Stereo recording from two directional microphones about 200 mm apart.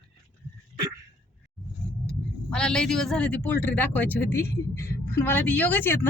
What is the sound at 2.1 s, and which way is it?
Speech, 5° left (ahead or behind).